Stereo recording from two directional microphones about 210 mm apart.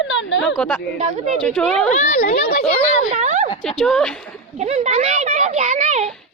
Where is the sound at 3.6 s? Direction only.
Centre (ahead or behind).